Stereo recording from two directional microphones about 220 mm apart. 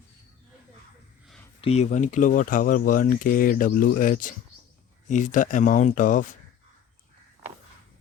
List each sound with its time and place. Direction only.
1.6 s speech: 30° left (ahead or behind)